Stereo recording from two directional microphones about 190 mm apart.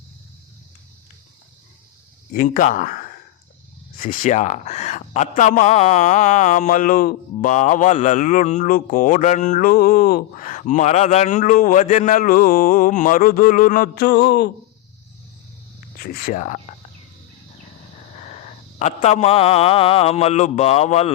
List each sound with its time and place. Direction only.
2.3 s speech: 45° left (ahead or behind); by 14.5 s 65° left (ahead or behind)
16.0 s speech: 50° left (ahead or behind)
18.8 s a man's voice: 35° left (ahead or behind)